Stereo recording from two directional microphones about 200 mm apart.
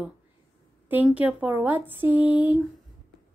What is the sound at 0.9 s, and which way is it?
Speech, 5° right (ahead or behind).